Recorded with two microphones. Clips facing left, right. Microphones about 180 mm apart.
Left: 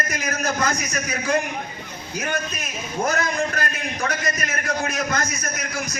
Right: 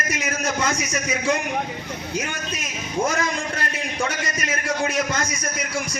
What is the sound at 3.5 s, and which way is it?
A man's voice, 25° right (ahead or behind).